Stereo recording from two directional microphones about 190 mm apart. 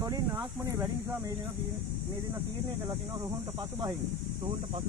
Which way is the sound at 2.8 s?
20° right (ahead or behind).